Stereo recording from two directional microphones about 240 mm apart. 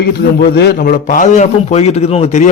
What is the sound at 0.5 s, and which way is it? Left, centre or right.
A man's voice, left.